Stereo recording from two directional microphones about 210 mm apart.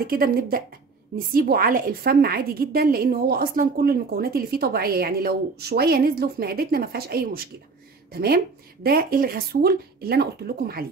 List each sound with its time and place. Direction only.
0.0 s a woman's voice: 45° right (ahead or behind)